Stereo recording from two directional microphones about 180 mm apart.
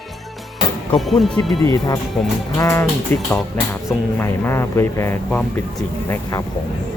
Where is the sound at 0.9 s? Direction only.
Centre (ahead or behind).